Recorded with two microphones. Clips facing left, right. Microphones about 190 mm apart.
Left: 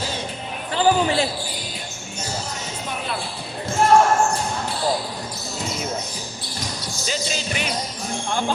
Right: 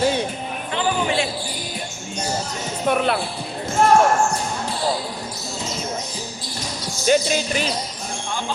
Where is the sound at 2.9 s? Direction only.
65° right (ahead or behind).